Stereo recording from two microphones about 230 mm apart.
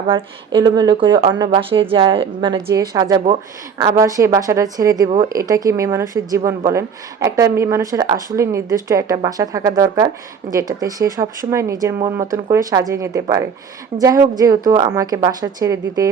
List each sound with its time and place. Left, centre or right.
0.1 s speech: right